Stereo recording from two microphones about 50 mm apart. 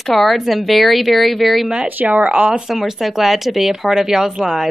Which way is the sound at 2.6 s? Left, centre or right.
Centre.